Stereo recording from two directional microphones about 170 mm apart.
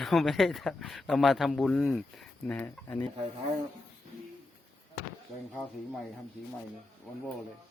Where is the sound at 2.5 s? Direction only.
10° left (ahead or behind).